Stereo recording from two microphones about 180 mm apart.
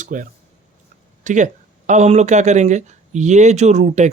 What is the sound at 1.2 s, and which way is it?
Speech, 45° right (ahead or behind).